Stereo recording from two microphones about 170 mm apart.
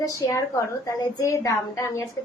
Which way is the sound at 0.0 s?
20° left (ahead or behind).